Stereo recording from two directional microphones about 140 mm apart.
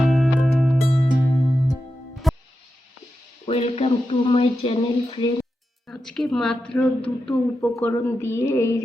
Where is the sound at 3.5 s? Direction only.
45° left (ahead or behind).